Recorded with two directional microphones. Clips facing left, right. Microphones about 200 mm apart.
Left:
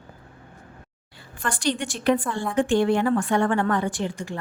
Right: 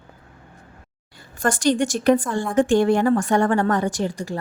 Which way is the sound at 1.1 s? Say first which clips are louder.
Right 7 dB; 45° right (ahead or behind).